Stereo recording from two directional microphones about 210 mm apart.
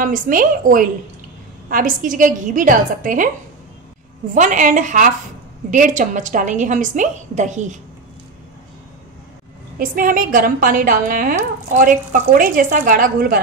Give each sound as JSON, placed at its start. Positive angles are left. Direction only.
{"t": 0.0, "sound": "a woman's voice", "side_deg": -40}
{"t": 4.3, "sound": "a woman's voice", "side_deg": -35}
{"t": 9.8, "sound": "a woman's voice", "side_deg": -40}